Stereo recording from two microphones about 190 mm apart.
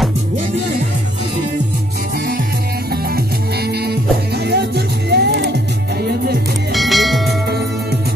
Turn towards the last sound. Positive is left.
turn(degrees=-60)  # may be behind; listen again after turning